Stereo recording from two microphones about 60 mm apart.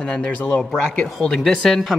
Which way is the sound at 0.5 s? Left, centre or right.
Centre.